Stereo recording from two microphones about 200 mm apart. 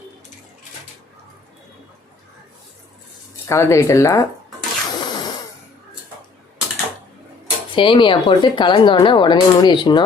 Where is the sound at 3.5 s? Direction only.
15° left (ahead or behind).